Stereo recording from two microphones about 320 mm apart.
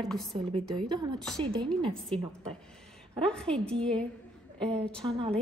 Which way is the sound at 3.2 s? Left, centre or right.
Centre.